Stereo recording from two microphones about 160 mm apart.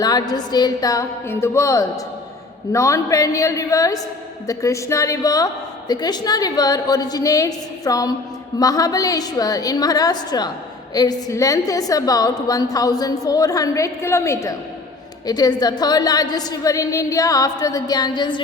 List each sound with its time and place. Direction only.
0.0 s a woman's voice: 25° left (ahead or behind)